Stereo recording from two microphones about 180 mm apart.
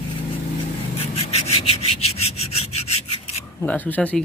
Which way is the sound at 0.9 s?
35° left (ahead or behind).